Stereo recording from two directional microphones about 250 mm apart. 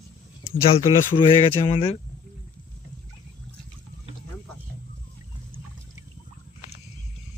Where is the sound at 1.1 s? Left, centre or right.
Centre.